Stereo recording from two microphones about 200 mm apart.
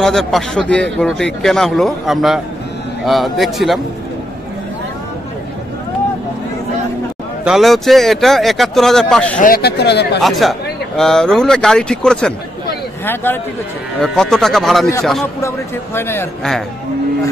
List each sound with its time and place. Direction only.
0.0 s a man's voice: centre (ahead or behind)
7.4 s a man's voice: centre (ahead or behind)
9.4 s speech: 50° left (ahead or behind)
10.2 s a man's voice: centre (ahead or behind)
15.4 s speech: 10° left (ahead or behind)